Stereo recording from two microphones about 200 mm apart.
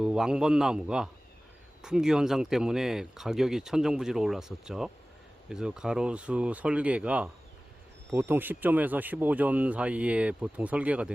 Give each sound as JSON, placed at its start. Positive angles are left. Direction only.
{"t": 0.0, "sound": "speech", "side_deg": -5}